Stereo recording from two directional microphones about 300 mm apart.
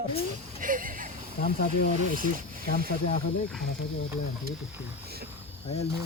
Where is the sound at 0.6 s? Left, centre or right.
Right.